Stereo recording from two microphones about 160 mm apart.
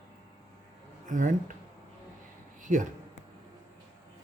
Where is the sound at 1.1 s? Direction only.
55° right (ahead or behind).